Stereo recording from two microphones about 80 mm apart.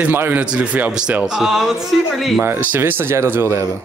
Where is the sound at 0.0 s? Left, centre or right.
Right; by 2.4 s centre.